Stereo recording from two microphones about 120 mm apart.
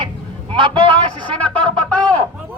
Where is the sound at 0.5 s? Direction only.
45° right (ahead or behind).